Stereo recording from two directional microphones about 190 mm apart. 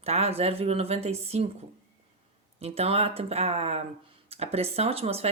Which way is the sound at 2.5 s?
30° right (ahead or behind).